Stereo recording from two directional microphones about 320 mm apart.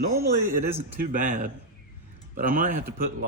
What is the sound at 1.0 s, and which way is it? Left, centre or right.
Speech, right.